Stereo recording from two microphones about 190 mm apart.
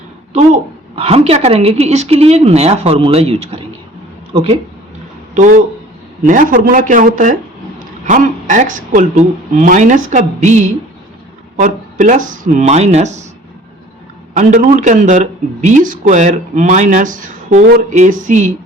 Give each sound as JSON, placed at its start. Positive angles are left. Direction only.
{"t": 0.3, "sound": "a man's voice", "side_deg": -35}
{"t": 14.3, "sound": "speech", "side_deg": -40}